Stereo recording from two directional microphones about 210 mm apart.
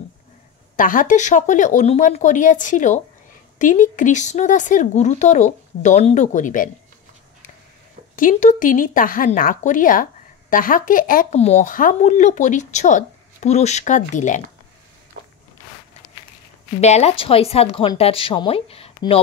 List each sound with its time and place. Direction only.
0.7 s speech: 40° left (ahead or behind)
8.2 s speech: 35° left (ahead or behind)
16.8 s a woman's voice: 30° left (ahead or behind)